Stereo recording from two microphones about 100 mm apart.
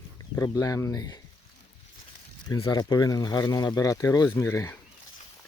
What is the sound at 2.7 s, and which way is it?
Speech, 40° left (ahead or behind).